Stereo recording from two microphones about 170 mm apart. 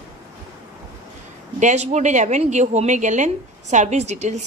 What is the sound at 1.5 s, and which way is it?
A woman's voice, 45° right (ahead or behind).